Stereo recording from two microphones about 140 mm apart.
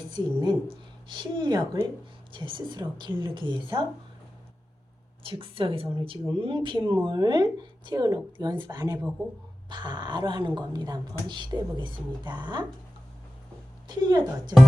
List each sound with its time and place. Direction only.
0.1 s a woman's voice: 30° right (ahead or behind)
5.2 s a woman's voice: 40° right (ahead or behind)
13.8 s a woman's voice: 30° right (ahead or behind)